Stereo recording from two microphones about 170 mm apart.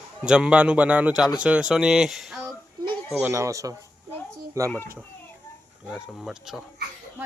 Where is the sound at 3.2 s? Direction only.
15° right (ahead or behind).